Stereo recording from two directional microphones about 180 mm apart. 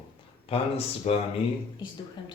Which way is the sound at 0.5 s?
35° left (ahead or behind).